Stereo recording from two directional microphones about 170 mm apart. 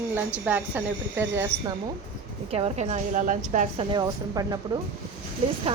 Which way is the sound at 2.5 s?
40° right (ahead or behind).